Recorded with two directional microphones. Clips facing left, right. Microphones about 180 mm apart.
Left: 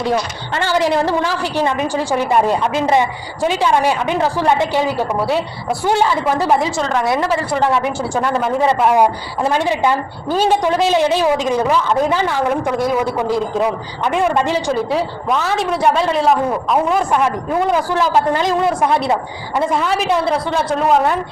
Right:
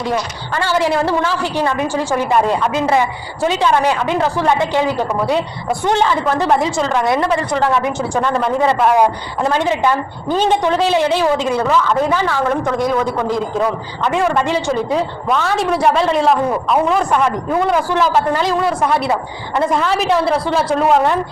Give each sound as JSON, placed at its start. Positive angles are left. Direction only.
{"t": 1.6, "sound": "a woman's voice", "side_deg": 15}
{"t": 19.5, "sound": "a man's voice", "side_deg": 5}